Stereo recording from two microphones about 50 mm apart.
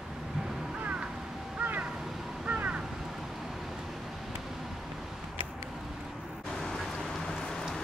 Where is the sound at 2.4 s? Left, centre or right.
Right.